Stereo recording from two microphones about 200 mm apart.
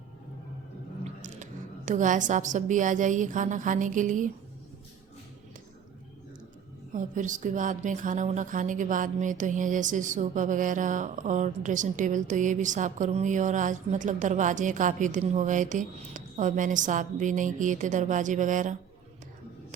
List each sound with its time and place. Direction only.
1.2 s a woman's voice: 40° right (ahead or behind)
6.9 s a woman's voice: 40° right (ahead or behind)